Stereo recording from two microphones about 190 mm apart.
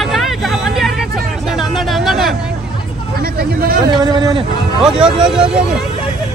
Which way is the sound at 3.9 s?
25° right (ahead or behind).